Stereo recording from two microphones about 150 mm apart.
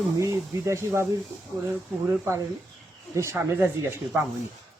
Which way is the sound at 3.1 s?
15° right (ahead or behind).